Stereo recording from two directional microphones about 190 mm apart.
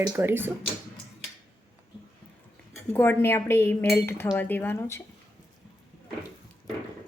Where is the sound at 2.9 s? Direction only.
10° left (ahead or behind).